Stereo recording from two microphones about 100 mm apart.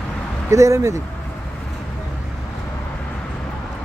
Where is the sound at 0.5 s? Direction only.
30° right (ahead or behind).